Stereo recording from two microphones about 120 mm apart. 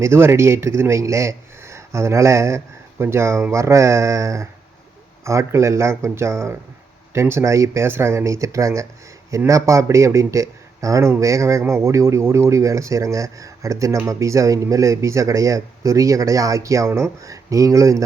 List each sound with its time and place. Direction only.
0.0 s a man's voice: 20° right (ahead or behind)